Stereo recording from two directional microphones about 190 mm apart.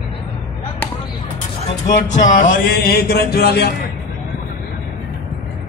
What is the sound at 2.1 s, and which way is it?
Music, 40° left (ahead or behind).